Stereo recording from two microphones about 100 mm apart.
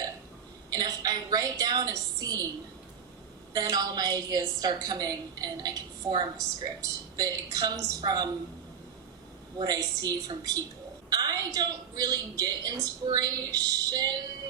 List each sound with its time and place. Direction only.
0.7 s a woman's voice: 40° right (ahead or behind)
3.5 s a woman's voice: 40° right (ahead or behind)
9.6 s a woman's voice: 40° right (ahead or behind)